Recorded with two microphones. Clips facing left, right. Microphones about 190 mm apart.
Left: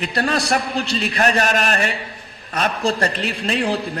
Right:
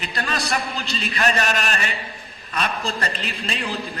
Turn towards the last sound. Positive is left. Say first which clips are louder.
# left 8 dB
turn(degrees=60)  # may be behind; listen again after turning